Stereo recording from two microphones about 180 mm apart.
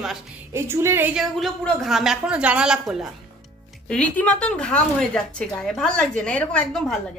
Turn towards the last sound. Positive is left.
turn(degrees=5)  # may be behind; listen again after turning